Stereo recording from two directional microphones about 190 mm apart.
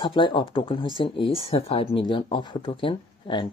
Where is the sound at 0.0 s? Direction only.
25° left (ahead or behind).